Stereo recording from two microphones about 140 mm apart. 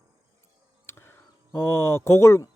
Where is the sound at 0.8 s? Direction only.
15° left (ahead or behind).